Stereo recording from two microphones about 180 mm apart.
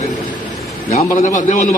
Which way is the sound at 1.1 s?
45° left (ahead or behind).